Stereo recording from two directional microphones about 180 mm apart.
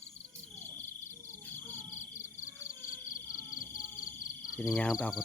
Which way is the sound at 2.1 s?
45° left (ahead or behind).